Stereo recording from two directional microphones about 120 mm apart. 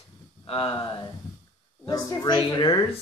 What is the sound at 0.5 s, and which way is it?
Speech, 50° left (ahead or behind).